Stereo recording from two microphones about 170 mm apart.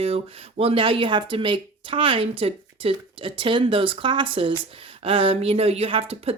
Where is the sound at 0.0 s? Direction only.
35° right (ahead or behind).